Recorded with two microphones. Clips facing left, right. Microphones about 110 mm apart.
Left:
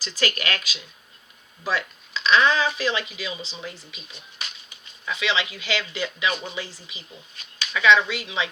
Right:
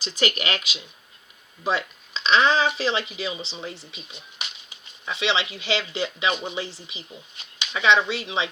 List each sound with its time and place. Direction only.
0.0 s speech: 25° right (ahead or behind)